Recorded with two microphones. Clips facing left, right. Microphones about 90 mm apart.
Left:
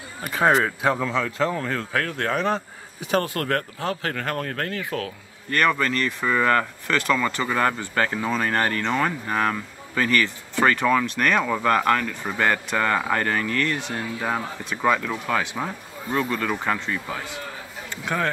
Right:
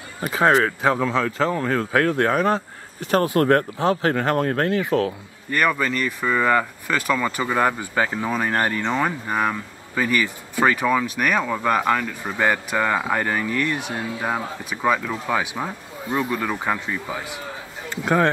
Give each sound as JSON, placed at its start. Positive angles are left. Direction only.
{"t": 0.3, "sound": "speech", "side_deg": 0}
{"t": 1.9, "sound": "speech", "side_deg": -15}
{"t": 2.3, "sound": "speech", "side_deg": 0}
{"t": 3.3, "sound": "speech", "side_deg": -20}
{"t": 5.5, "sound": "speech", "side_deg": -5}